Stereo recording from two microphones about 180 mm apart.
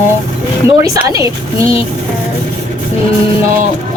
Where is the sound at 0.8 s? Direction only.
20° right (ahead or behind).